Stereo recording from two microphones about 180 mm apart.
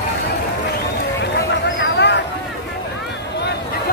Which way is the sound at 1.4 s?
70° left (ahead or behind).